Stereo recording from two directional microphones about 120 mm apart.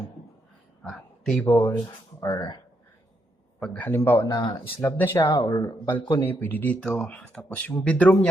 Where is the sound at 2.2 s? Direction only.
35° left (ahead or behind).